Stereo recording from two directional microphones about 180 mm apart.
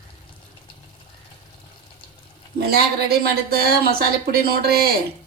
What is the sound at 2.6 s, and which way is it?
Speech, 60° right (ahead or behind).